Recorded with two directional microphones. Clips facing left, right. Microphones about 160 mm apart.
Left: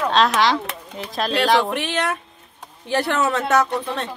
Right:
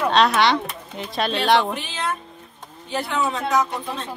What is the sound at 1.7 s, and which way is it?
Speech, 75° left (ahead or behind).